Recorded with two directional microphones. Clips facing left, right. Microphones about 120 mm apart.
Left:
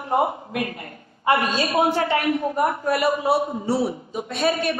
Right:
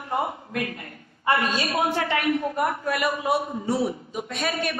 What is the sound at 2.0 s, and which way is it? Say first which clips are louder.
A man's voice: left 3 dB; 30° left (ahead or behind).